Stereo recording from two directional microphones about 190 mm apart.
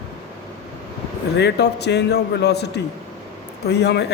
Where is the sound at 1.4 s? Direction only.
60° left (ahead or behind).